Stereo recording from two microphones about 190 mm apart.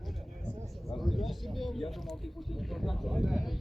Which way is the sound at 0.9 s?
Centre (ahead or behind).